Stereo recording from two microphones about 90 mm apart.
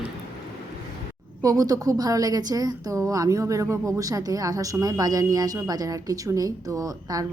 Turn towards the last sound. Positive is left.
turn(degrees=-45)  # may be behind; listen again after turning